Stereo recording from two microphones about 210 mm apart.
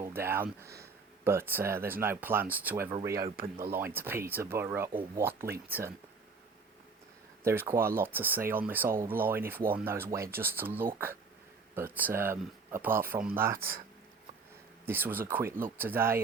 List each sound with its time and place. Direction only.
0.0 s a sound: 10° right (ahead or behind)
0.6 s speech: 15° right (ahead or behind)
3.3 s speech: 45° right (ahead or behind)
3.7 s speech: 10° right (ahead or behind)
7.4 s speech: 10° right (ahead or behind)
14.8 s speech: 10° right (ahead or behind)